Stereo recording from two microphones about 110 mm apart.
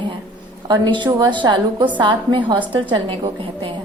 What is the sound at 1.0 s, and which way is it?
A woman's voice, 45° right (ahead or behind).